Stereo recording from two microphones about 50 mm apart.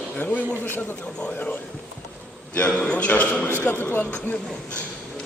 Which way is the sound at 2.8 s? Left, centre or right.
Left.